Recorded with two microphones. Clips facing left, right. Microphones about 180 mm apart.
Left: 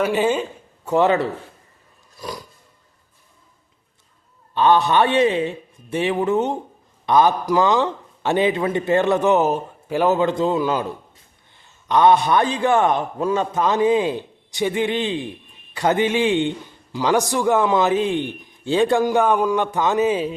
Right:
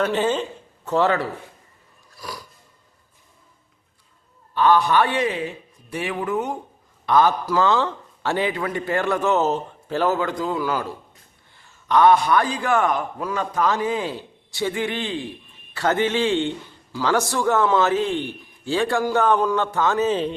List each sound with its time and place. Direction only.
0.0 s a man's voice: 10° left (ahead or behind)
2.1 s a sound: 20° left (ahead or behind)
4.5 s a man's voice: 25° left (ahead or behind)